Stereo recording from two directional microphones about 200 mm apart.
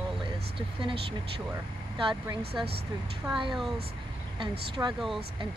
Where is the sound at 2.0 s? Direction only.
25° right (ahead or behind).